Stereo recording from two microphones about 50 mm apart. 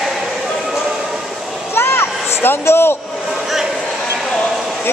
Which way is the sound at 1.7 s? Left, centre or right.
Left.